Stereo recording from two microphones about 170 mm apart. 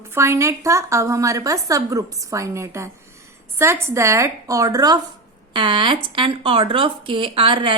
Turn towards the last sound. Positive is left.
turn(degrees=-30)  # may be behind; listen again after turning